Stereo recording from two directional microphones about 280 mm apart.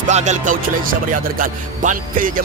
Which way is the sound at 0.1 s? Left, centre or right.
Right.